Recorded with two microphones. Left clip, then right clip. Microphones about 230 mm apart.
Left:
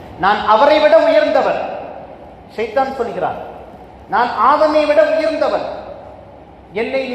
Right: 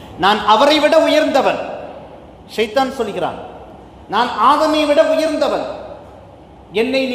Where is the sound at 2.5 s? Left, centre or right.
Right.